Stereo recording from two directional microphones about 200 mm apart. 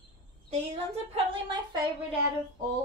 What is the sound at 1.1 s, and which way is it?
Speech, 25° right (ahead or behind).